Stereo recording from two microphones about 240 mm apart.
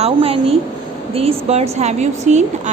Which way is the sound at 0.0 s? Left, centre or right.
Right.